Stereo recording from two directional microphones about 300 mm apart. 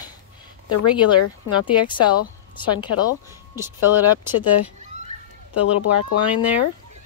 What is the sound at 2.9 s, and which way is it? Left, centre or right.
Speech, left.